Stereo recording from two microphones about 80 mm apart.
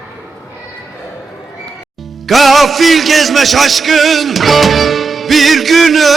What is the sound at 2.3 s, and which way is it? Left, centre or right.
Music, centre.